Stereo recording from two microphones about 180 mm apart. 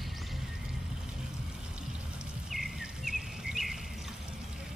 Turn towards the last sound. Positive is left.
turn(degrees=0)  # may be behind; listen again after turning